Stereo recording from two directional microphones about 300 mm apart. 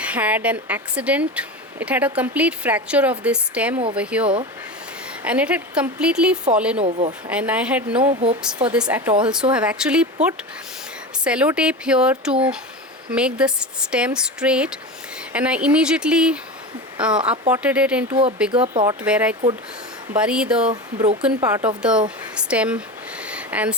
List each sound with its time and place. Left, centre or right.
0.0 s speech: centre
6.8 s speech: centre
7.3 s speech: centre
11.2 s speech: centre
18.5 s speech: centre
19.0 s speech: centre
20.7 s speech: centre
21.2 s speech: centre
23.2 s a sound: centre